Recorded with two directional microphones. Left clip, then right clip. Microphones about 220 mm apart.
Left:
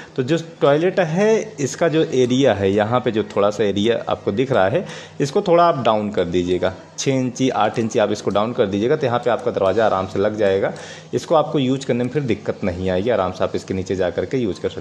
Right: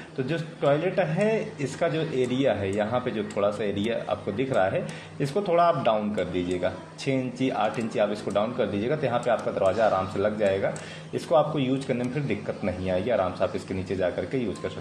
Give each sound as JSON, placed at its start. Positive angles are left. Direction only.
{"t": 0.3, "sound": "a man's voice", "side_deg": 50}